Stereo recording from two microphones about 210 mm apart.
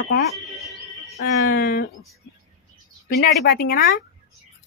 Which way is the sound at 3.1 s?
45° left (ahead or behind).